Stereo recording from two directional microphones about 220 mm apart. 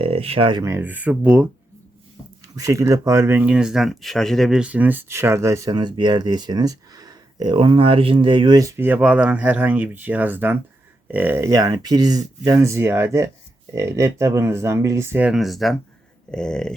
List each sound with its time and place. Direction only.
0.0 s speech: 25° right (ahead or behind); by 1.5 s 5° right (ahead or behind)
2.6 s speech: 15° right (ahead or behind)
16.3 s a sound: 5° left (ahead or behind)